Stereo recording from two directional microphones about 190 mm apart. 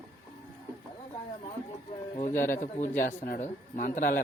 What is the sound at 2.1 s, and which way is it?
Speech, 40° left (ahead or behind).